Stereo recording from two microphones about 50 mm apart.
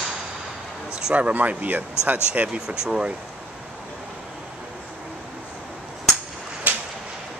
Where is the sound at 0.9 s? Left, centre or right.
Right.